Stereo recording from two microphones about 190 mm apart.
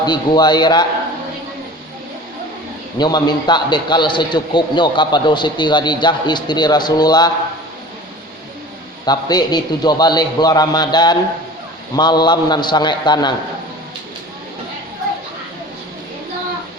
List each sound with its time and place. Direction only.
0.0 s a man's voice: 20° left (ahead or behind)
3.0 s a man's voice: 20° left (ahead or behind)
9.0 s a man's voice: 20° left (ahead or behind)